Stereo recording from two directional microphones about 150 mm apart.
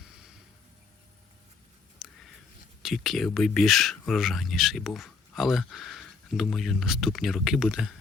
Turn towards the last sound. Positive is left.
turn(degrees=0)  # may be behind; listen again after turning